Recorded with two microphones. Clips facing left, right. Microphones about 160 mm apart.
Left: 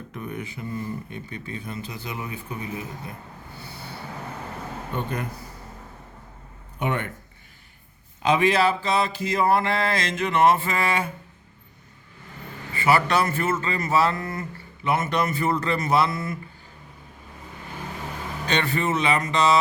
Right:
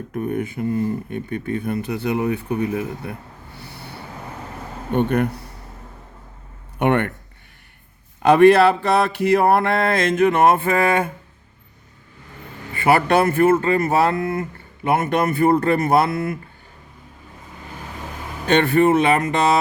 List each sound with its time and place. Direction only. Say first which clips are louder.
0.1 s speech: right 11 dB; 50° right (ahead or behind); by 3.2 s 65° right (ahead or behind)
3.6 s vehicle: right 2 dB; 65° right (ahead or behind)
4.9 s speech: right 12 dB; 70° right (ahead or behind)
6.7 s speech: right 9 dB; 65° right (ahead or behind)
8.2 s speech: right 9 dB; 65° right (ahead or behind)
12.7 s speech: right 5 dB; 55° right (ahead or behind)
18.4 s speech: right 10 dB; 55° right (ahead or behind)